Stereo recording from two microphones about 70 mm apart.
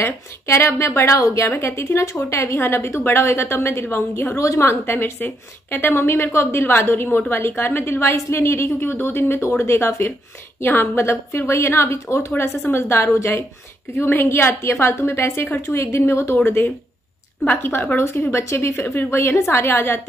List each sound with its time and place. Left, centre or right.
0.0 s a woman's voice: left
4.4 s a woman's voice: left
4.8 s a woman's voice: left
12.3 s a woman's voice: left
17.5 s a woman's voice: left